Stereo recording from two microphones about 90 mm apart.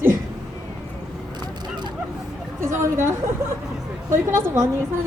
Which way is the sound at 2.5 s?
30° right (ahead or behind).